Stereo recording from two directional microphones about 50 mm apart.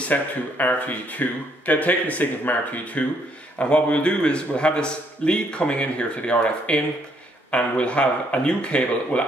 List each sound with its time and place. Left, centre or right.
0.0 s a man's voice: left